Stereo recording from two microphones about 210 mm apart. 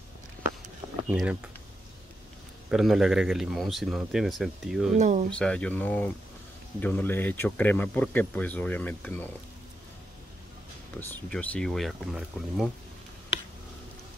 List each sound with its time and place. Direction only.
1.1 s speech: 5° right (ahead or behind)
2.7 s speech: centre (ahead or behind)
4.9 s speech: 35° right (ahead or behind)
5.3 s speech: 5° left (ahead or behind)
11.0 s speech: 5° left (ahead or behind)